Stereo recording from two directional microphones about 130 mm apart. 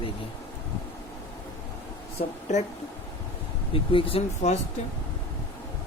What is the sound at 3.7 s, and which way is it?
Speech, 45° left (ahead or behind).